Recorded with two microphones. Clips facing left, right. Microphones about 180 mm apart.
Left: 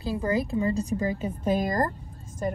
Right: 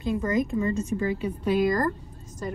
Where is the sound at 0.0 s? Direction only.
35° left (ahead or behind).